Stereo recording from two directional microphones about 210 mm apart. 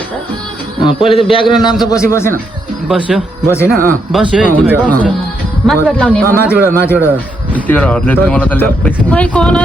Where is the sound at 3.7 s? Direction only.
40° right (ahead or behind).